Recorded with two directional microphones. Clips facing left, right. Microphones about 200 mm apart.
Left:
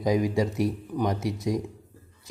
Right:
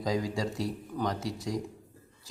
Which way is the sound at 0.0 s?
20° left (ahead or behind).